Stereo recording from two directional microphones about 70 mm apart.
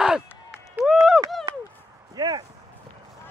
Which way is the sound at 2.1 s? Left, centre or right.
Right.